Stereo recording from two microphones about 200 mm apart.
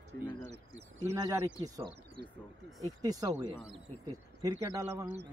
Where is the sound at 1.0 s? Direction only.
15° right (ahead or behind).